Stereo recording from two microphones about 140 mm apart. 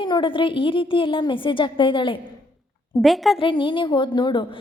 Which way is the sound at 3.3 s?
35° left (ahead or behind).